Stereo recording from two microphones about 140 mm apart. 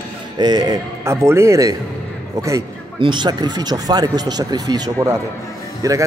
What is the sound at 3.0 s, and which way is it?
Speech, 35° right (ahead or behind).